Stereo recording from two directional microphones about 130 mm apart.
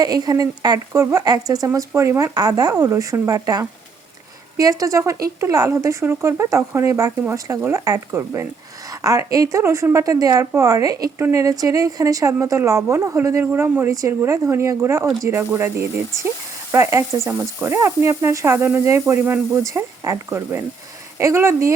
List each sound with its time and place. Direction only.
0.0 s a woman's voice: 30° right (ahead or behind)